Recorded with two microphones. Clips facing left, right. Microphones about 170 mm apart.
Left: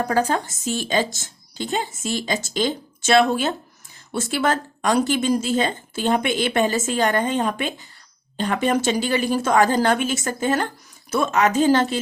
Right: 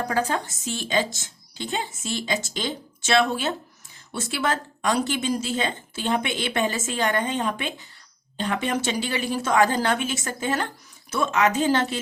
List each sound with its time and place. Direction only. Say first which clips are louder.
0.1 s a woman's voice: left 4 dB; 40° left (ahead or behind)